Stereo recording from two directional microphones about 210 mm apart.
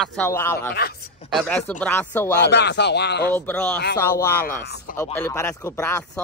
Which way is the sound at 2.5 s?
55° left (ahead or behind).